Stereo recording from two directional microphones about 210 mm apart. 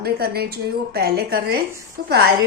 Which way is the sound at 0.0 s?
50° right (ahead or behind).